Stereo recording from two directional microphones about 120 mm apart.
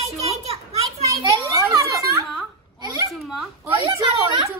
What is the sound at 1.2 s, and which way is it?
Children playing, 25° right (ahead or behind).